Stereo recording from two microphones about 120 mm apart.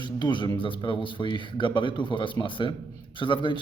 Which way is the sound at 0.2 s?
40° left (ahead or behind).